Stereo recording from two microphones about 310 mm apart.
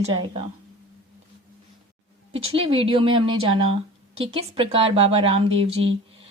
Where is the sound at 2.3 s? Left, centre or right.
Centre.